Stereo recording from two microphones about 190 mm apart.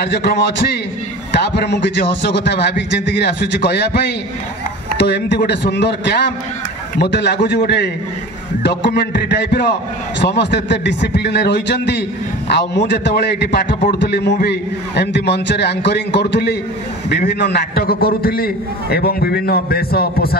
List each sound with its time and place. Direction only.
0.0 s a man's voice: 60° left (ahead or behind)